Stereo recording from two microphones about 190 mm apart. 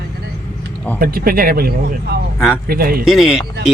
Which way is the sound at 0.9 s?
50° right (ahead or behind).